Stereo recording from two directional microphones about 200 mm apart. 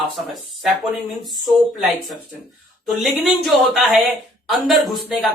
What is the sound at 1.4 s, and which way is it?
Speech, centre (ahead or behind).